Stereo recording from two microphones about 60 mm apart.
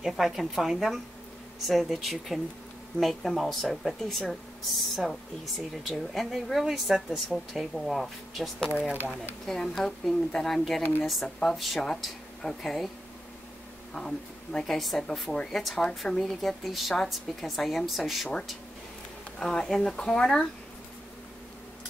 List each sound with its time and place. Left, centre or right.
0.0 s speech: centre
8.6 s speech: centre
9.5 s a woman's voice: centre
10.8 s speech: left
11.2 s a woman's voice: centre
13.9 s a woman's voice: centre
19.4 s a woman's voice: centre